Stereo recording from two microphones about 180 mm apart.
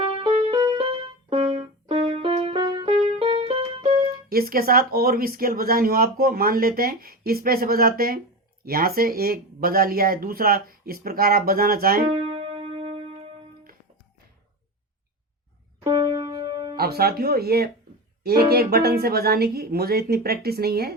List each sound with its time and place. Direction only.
0.0 s music: 30° right (ahead or behind)
0.8 s music: 30° right (ahead or behind)
2.9 s music: 40° right (ahead or behind)
4.1 s speech: 55° right (ahead or behind)
12.1 s music: 30° right (ahead or behind)
16.7 s speech: 60° right (ahead or behind)